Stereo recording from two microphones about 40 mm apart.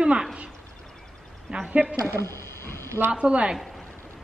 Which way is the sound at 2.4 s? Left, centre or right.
Left.